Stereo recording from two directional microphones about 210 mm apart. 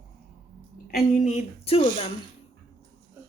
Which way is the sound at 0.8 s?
40° left (ahead or behind).